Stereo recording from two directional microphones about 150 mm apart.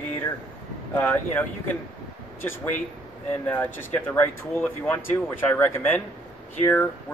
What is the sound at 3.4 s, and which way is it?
Speech, 15° left (ahead or behind).